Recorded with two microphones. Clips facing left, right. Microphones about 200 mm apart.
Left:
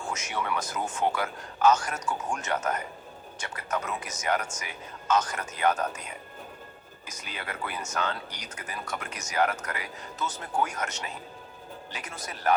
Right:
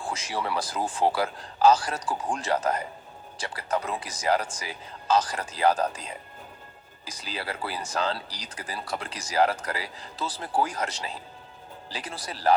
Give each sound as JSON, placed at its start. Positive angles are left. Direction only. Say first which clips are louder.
{"t": 0.0, "sound": "speech", "louder": "right 2 dB", "side_deg": -30}